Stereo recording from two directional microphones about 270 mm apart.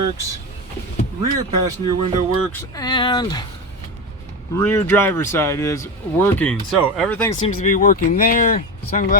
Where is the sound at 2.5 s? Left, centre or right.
Centre.